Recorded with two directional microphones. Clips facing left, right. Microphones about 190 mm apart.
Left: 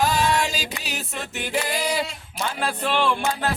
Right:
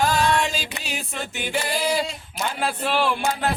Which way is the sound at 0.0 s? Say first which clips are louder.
Right 1 dB; centre (ahead or behind).